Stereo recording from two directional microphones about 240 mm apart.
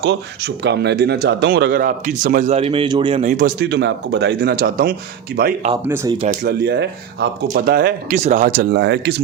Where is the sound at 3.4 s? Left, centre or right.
Right.